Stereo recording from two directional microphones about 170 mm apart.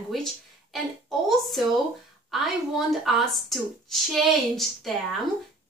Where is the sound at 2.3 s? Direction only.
Centre (ahead or behind).